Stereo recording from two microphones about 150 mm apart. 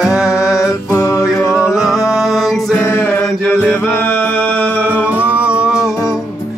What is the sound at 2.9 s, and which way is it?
Mantra, 15° left (ahead or behind).